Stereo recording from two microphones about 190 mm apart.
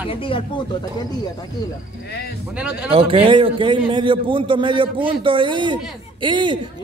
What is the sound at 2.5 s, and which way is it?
Speech, 5° right (ahead or behind).